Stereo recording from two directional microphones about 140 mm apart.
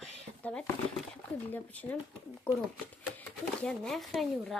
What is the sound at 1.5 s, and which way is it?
Speech, 10° left (ahead or behind).